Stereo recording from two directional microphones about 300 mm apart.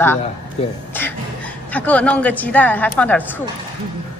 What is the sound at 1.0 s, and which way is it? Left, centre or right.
Beatboxing, centre.